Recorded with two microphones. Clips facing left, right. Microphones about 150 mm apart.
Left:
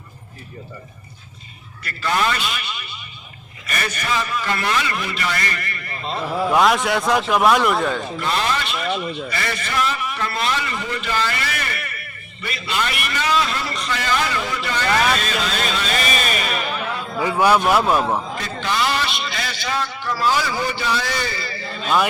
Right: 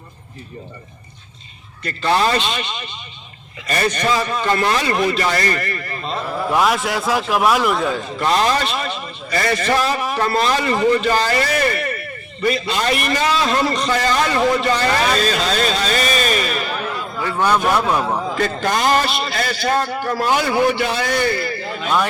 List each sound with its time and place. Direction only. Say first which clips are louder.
1.8 s a man's voice: right 4 dB; 35° right (ahead or behind)
3.7 s a man's voice: right 6 dB; 30° right (ahead or behind)
6.5 s a man's voice: left 1 dB; centre (ahead or behind)
8.3 s a man's voice: right 6 dB; 35° right (ahead or behind)
17.2 s speech: left 2 dB; 10° left (ahead or behind)
18.3 s a man's voice: right 4 dB; 55° right (ahead or behind)